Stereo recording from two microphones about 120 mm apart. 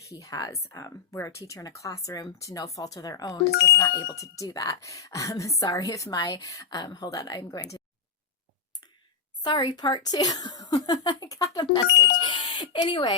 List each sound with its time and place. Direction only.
0.1 s speech: 30° left (ahead or behind)
9.4 s speech: 40° left (ahead or behind)